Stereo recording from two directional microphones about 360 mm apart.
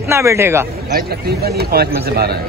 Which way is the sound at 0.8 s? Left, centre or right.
Right.